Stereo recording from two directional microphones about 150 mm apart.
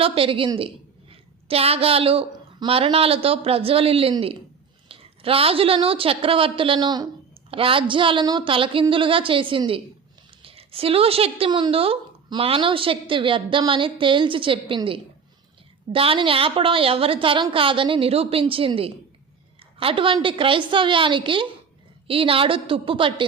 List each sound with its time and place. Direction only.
0.0 s a woman's voice: 35° right (ahead or behind)